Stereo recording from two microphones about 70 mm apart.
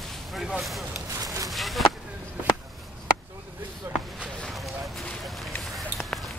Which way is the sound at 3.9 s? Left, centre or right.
Right.